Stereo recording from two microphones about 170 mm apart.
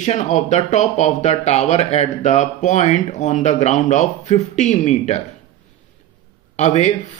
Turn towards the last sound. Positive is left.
turn(degrees=45)  # may be behind; listen again after turning